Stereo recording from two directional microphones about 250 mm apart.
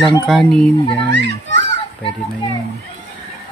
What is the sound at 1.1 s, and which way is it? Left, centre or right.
Speech, right.